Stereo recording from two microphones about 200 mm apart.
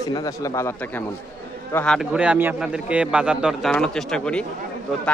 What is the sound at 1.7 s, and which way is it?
A man's voice, centre (ahead or behind).